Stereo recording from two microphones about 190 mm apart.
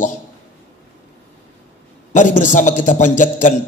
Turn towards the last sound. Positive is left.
turn(degrees=40)  # may be behind; listen again after turning